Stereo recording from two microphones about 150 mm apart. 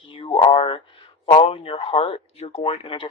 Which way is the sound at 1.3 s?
40° left (ahead or behind).